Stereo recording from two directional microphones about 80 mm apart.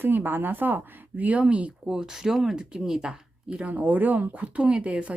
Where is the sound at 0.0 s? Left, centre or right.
Right.